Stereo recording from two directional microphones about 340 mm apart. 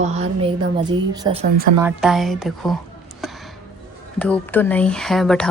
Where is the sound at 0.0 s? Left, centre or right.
Centre.